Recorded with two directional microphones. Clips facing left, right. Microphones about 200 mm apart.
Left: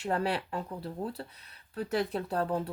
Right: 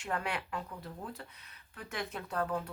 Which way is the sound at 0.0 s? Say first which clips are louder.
Left 6 dB; 35° left (ahead or behind).